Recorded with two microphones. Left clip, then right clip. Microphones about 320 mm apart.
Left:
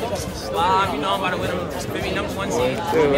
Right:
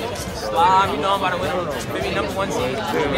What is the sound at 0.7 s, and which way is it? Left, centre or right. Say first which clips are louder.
Speech: right 2 dB; centre.